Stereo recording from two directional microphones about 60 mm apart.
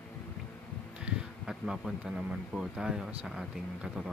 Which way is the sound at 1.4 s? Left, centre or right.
Centre.